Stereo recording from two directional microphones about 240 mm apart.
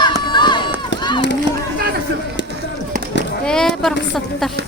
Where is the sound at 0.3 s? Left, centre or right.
Centre.